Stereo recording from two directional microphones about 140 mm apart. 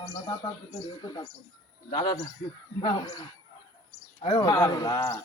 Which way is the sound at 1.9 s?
30° left (ahead or behind).